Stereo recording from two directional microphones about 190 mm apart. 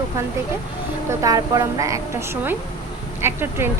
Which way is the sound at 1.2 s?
20° right (ahead or behind).